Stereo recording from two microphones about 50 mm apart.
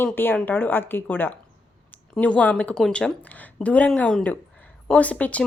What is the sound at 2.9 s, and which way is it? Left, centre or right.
Speech, centre.